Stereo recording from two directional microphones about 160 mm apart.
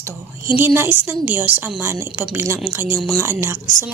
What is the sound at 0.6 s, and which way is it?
A woman's voice, 10° right (ahead or behind).